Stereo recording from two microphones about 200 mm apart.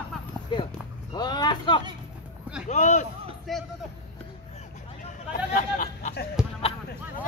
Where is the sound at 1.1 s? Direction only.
20° left (ahead or behind).